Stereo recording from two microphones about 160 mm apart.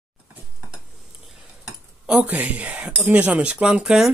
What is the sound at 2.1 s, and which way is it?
Speech, 10° right (ahead or behind).